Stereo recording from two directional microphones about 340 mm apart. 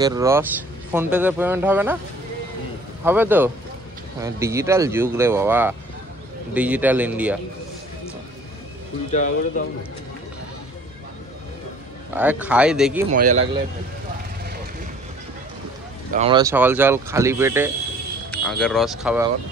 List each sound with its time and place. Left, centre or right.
0.0 s speech: centre
3.0 s speech: centre
9.1 s speech: left
12.1 s speech: centre
13.1 s speech: right
16.1 s speech: centre